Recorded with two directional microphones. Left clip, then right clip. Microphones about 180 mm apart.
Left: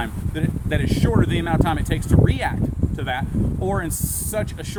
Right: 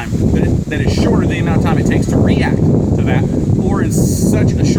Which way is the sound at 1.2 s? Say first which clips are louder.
Right 5 dB; 5° left (ahead or behind).